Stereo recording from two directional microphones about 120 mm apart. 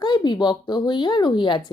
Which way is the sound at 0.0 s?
40° left (ahead or behind).